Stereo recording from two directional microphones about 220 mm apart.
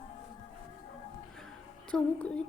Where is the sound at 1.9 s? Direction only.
5° left (ahead or behind).